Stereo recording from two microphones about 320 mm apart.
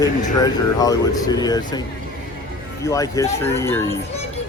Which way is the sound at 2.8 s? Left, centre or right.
Centre.